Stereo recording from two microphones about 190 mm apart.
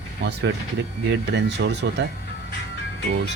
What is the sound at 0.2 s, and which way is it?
Speech, 65° right (ahead or behind).